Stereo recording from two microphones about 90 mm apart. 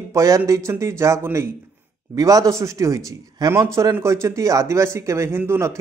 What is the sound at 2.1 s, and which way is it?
Speech, 40° right (ahead or behind).